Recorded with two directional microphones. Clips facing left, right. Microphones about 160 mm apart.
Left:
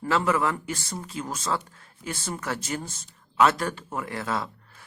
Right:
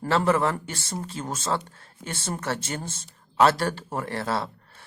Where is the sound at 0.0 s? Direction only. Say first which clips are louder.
Right 2 dB; 30° right (ahead or behind).